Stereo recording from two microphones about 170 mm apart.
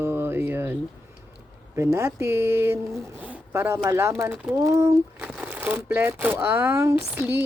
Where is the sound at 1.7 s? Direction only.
15° right (ahead or behind).